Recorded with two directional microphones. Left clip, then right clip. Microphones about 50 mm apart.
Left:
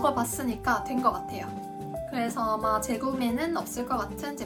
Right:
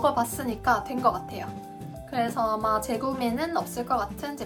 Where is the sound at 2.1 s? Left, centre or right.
Right.